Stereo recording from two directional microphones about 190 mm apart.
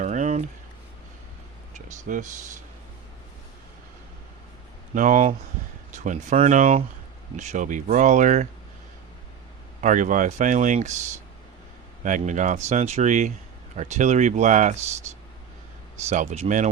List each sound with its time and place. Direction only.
0.0 s a sound: 40° right (ahead or behind)
1.7 s speech: 45° right (ahead or behind)
4.9 s speech: 45° right (ahead or behind)
9.8 s speech: 40° right (ahead or behind)
16.0 s speech: 35° right (ahead or behind)